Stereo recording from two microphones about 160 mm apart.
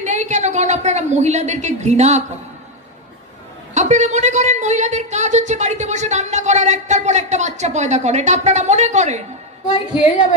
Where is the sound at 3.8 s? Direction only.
45° right (ahead or behind).